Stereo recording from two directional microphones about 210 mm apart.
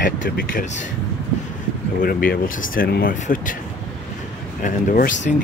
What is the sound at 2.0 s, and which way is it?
Speech, 45° left (ahead or behind).